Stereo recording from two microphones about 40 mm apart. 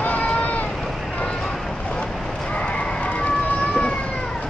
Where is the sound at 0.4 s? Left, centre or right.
Left.